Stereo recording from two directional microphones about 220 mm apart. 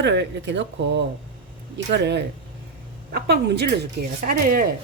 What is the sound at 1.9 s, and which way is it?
A woman's voice, 50° right (ahead or behind).